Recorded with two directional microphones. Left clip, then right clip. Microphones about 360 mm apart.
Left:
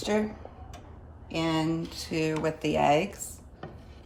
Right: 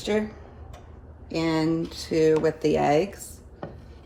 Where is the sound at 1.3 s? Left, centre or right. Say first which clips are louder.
Right 4 dB; centre.